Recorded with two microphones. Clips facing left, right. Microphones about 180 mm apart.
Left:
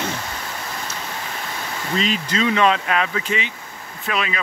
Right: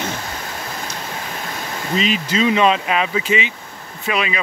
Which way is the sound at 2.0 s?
15° right (ahead or behind).